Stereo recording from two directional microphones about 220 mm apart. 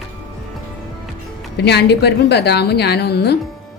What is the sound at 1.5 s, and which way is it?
Speech, 50° left (ahead or behind).